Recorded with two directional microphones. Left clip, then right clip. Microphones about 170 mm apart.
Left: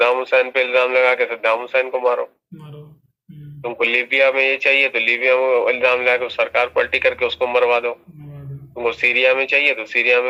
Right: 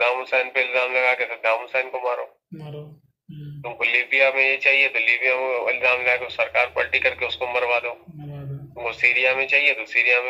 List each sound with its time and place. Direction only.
0.0 s speech: 40° left (ahead or behind)
3.6 s speech: 40° left (ahead or behind)